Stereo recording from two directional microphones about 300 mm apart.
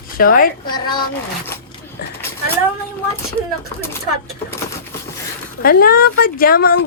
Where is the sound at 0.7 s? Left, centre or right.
Centre.